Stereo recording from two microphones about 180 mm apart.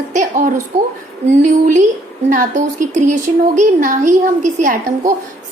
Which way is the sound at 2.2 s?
45° right (ahead or behind).